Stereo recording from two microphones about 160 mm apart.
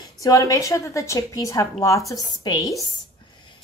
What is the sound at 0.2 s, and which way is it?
A woman's voice, 20° left (ahead or behind).